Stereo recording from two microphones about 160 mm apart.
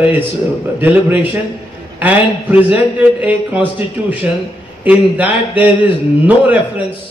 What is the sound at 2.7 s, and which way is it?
A man's voice, 10° right (ahead or behind).